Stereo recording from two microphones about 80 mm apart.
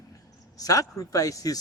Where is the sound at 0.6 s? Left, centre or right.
Left.